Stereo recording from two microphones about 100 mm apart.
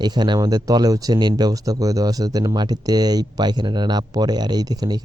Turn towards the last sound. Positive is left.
turn(degrees=-40)  # may be behind; listen again after turning